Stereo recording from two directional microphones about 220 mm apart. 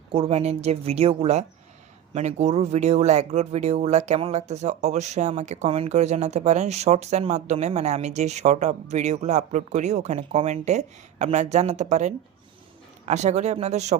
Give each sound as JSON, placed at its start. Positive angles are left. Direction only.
{"t": 0.1, "sound": "a woman's voice", "side_deg": -25}